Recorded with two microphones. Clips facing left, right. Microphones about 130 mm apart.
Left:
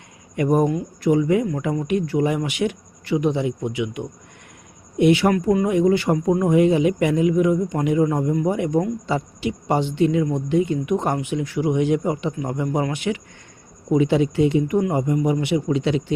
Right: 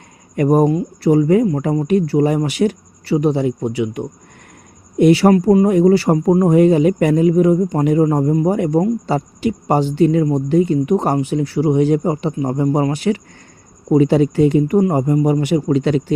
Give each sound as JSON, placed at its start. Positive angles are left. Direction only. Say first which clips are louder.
{"t": 0.3, "sound": "a man's voice", "louder": "right 5 dB", "side_deg": -40}